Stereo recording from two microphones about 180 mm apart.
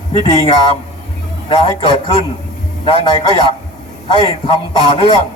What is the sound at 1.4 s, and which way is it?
A man's voice, 30° left (ahead or behind).